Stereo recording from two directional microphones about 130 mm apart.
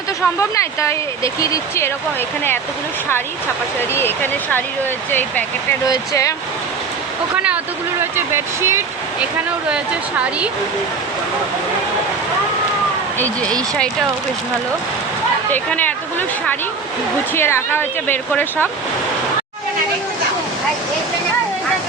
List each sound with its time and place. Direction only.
0.3 s speech: 20° left (ahead or behind)
3.8 s speech: 15° left (ahead or behind)
5.9 s speech: 25° left (ahead or behind)
7.3 s speech: 10° right (ahead or behind)
9.6 s speech: 10° right (ahead or behind)
15.5 s speech: 15° left (ahead or behind)
17.3 s speech: 20° left (ahead or behind)